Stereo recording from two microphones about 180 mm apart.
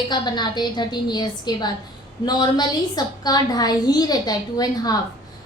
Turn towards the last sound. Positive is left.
turn(degrees=20)  # may be behind; listen again after turning